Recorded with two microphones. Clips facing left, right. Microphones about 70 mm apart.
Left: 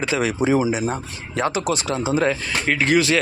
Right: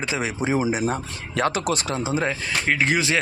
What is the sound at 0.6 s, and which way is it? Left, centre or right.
A man's voice, right.